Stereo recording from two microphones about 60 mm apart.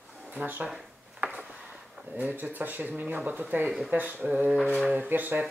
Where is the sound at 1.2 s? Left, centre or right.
Right.